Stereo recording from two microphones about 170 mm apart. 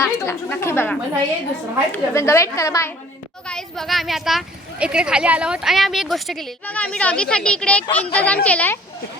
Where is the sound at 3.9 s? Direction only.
Centre (ahead or behind).